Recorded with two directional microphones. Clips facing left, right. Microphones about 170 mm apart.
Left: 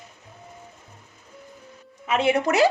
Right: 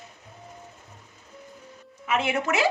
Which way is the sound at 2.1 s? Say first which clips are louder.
Left 4 dB; 35° left (ahead or behind).